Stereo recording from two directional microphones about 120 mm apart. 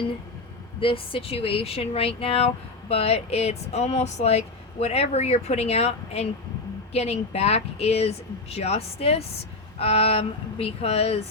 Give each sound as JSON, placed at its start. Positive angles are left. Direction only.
{"t": 0.8, "sound": "speech", "side_deg": 50}